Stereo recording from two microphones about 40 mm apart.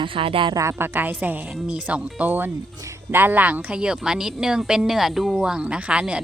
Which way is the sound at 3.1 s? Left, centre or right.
Right.